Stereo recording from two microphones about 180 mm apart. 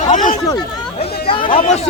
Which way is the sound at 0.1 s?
45° left (ahead or behind).